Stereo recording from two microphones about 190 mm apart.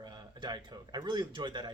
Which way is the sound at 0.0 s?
20° right (ahead or behind).